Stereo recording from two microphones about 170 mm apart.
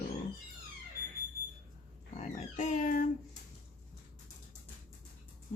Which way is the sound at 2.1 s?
45° left (ahead or behind).